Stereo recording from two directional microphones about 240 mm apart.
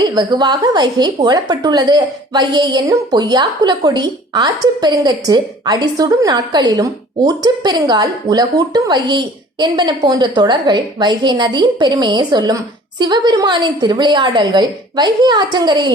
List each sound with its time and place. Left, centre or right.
0.0 s a woman's voice: centre